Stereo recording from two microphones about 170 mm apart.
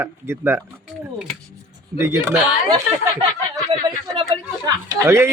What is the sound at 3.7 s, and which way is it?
Speech, 25° right (ahead or behind).